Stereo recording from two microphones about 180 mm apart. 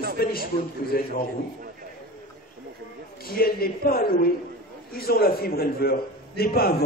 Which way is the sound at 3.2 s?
55° left (ahead or behind).